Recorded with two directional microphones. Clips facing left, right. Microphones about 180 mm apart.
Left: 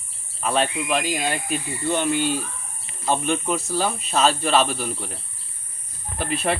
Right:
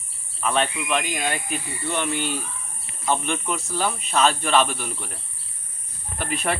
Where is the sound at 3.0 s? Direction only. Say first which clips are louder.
Left 2 dB; 35° left (ahead or behind).